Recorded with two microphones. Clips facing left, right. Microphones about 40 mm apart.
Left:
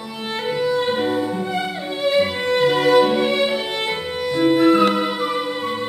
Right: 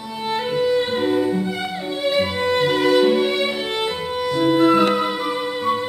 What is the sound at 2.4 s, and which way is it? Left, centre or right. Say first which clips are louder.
Music: left 1 dB; centre.